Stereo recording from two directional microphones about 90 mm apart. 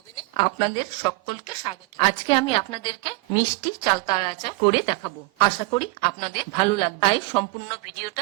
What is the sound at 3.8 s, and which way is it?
Speech, 50° left (ahead or behind).